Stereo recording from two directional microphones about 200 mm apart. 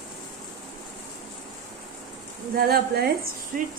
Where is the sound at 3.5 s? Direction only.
40° right (ahead or behind).